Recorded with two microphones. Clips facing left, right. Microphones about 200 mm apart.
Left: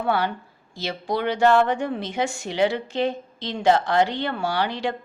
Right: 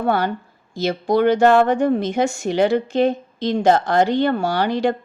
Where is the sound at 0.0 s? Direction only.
45° right (ahead or behind).